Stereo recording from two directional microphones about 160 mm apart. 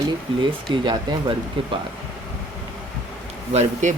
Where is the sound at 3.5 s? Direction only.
45° right (ahead or behind).